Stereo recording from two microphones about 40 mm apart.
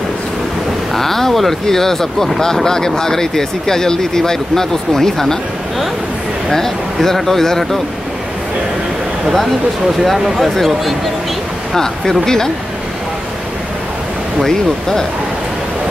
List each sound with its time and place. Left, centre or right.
0.9 s speech: centre
6.5 s speech: centre
10.0 s speech: centre
14.4 s speech: centre